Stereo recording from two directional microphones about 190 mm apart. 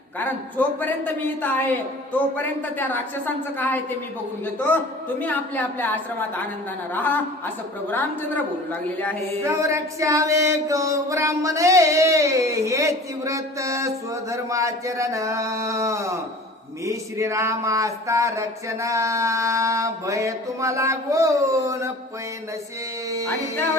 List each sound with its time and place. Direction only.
0.2 s a man's voice: 10° left (ahead or behind)
5.2 s a man's voice: 10° left (ahead or behind)
9.4 s singing: 15° right (ahead or behind)